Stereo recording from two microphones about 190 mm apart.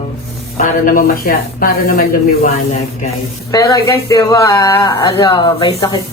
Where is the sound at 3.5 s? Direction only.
20° left (ahead or behind).